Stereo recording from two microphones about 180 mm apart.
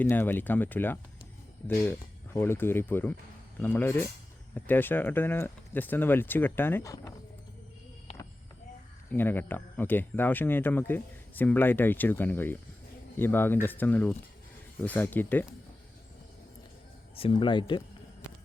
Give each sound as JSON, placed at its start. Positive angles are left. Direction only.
{"t": 0.0, "sound": "speech", "side_deg": 10}
{"t": 9.0, "sound": "speech", "side_deg": 10}
{"t": 17.2, "sound": "speech", "side_deg": 30}